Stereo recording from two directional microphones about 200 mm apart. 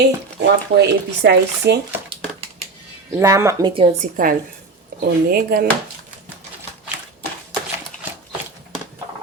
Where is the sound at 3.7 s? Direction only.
30° right (ahead or behind).